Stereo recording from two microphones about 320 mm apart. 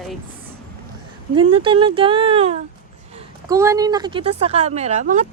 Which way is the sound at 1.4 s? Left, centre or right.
Centre.